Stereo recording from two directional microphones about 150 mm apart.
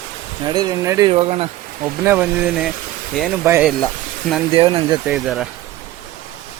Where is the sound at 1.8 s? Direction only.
15° right (ahead or behind).